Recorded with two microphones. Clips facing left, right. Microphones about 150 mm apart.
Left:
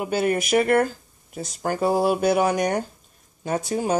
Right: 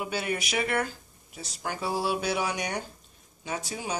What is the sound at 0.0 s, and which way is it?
Speech, 45° left (ahead or behind).